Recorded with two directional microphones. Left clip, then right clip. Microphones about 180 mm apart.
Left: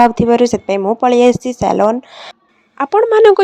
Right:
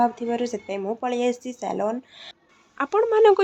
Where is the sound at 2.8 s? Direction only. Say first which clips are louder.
Left 9 dB; 35° left (ahead or behind).